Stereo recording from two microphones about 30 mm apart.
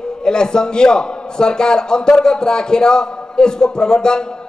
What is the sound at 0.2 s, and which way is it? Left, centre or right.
A man's voice, left.